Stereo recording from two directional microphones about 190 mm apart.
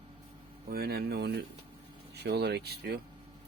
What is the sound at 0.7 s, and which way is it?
Speech, 55° right (ahead or behind).